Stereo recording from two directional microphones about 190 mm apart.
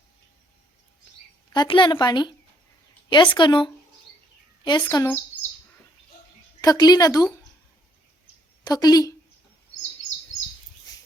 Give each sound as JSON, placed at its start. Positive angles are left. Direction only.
{"t": 1.5, "sound": "speech", "side_deg": 25}
{"t": 4.8, "sound": "speech", "side_deg": 15}
{"t": 6.6, "sound": "speech", "side_deg": 20}
{"t": 8.6, "sound": "speech", "side_deg": 20}